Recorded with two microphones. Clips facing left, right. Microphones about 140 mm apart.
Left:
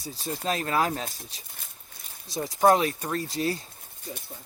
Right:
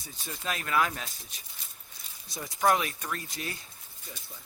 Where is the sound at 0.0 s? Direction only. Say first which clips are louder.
Left 7 dB; 35° left (ahead or behind).